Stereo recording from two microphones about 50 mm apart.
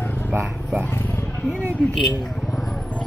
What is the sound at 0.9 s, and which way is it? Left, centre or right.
Speech, left.